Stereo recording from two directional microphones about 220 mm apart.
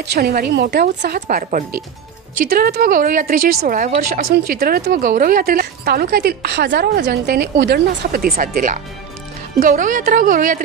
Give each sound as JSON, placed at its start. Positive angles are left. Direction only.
{"t": 0.0, "sound": "a woman's voice", "side_deg": -45}